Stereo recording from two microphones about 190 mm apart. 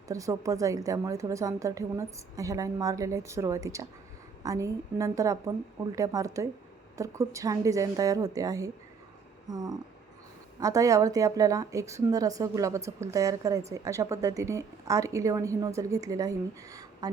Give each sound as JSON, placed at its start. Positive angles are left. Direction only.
{"t": 0.1, "sound": "a woman's voice", "side_deg": -15}